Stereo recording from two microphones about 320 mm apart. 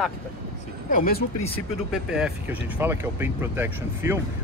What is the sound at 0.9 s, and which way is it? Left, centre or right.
Speech, left.